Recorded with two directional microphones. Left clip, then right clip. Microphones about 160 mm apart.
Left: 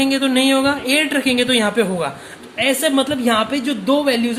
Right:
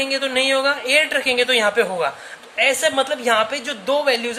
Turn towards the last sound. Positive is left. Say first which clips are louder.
# left 2 dB
turn(degrees=-20)  # may be behind; listen again after turning